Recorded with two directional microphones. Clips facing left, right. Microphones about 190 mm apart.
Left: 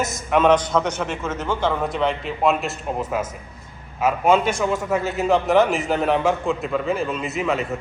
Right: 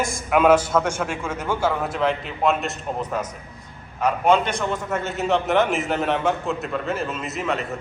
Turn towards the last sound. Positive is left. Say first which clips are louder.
# left 3 dB
turn(degrees=0)  # may be behind; listen again after turning